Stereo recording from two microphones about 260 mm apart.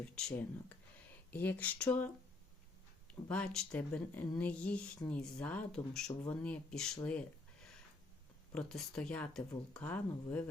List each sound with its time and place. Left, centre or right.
0.0 s speech: centre
3.2 s speech: centre
8.5 s speech: centre